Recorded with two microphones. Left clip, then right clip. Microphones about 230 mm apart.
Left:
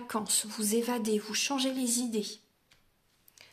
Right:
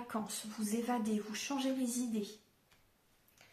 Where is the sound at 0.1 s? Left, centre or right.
Left.